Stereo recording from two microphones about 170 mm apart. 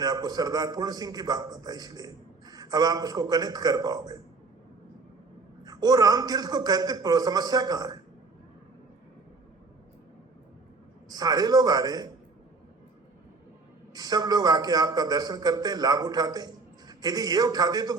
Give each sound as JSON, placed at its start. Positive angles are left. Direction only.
{"t": 0.0, "sound": "a man's voice", "side_deg": -25}
{"t": 5.6, "sound": "a man's voice", "side_deg": -20}
{"t": 11.1, "sound": "a man's voice", "side_deg": -25}
{"t": 13.9, "sound": "a man's voice", "side_deg": -25}